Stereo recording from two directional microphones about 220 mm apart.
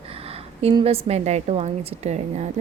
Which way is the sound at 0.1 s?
25° right (ahead or behind).